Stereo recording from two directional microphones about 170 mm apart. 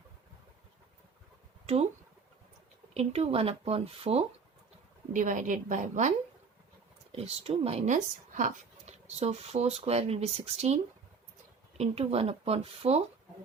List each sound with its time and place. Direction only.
1.6 s speech: 40° right (ahead or behind)
2.9 s speech: 40° right (ahead or behind)
5.1 s a woman's voice: 50° right (ahead or behind)
11.8 s speech: 35° right (ahead or behind)